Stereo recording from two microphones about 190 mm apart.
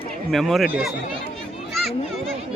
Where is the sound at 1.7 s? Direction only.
Centre (ahead or behind).